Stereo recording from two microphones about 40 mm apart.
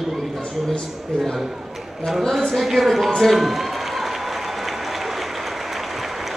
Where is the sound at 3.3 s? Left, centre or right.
Centre.